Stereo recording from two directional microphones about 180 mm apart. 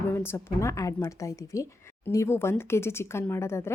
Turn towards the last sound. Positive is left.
turn(degrees=15)  # may be behind; listen again after turning